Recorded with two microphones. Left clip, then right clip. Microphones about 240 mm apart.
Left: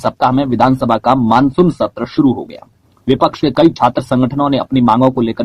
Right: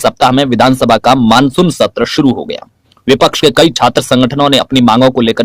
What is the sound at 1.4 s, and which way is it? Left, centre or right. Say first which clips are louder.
Speech: right 3 dB; right.